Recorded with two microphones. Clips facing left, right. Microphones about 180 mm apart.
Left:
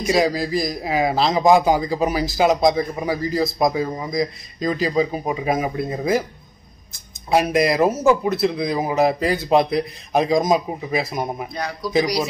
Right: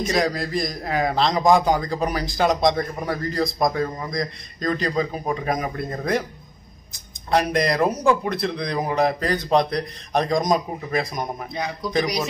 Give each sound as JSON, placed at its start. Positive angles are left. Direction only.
{"t": 0.0, "sound": "a man's voice", "side_deg": 0}
{"t": 7.2, "sound": "a man's voice", "side_deg": 5}
{"t": 11.5, "sound": "a man's voice", "side_deg": -20}